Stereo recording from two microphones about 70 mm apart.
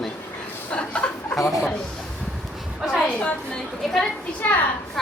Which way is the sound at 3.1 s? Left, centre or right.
Centre.